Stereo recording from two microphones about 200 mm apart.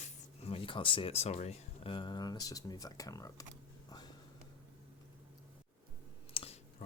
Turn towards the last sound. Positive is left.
turn(degrees=30)  # may be behind; listen again after turning